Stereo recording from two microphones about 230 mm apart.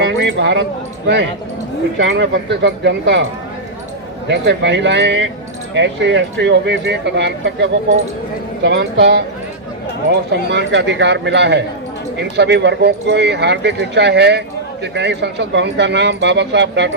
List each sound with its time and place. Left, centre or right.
0.2 s speech: right
4.3 s speech: right